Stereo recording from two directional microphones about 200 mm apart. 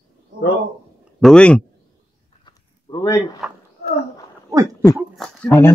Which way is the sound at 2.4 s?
20° left (ahead or behind).